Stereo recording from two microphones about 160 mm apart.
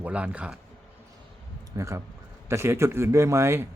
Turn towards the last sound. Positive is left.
turn(degrees=-15)  # may be behind; listen again after turning